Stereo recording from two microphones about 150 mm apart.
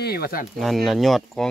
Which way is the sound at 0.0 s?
90° left.